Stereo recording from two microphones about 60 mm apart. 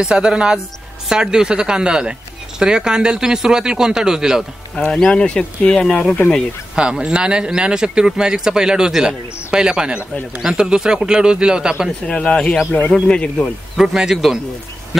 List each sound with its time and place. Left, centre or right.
0.0 s speech: centre
4.7 s speech: centre
6.7 s speech: centre
12.1 s speech: centre
13.7 s speech: centre